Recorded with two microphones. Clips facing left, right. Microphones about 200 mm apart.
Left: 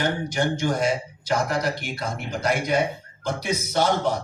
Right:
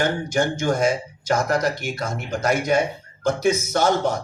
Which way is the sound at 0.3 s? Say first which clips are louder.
Right 2 dB; 45° right (ahead or behind).